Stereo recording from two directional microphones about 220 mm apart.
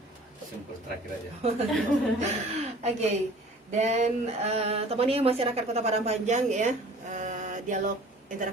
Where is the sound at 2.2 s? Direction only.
30° right (ahead or behind).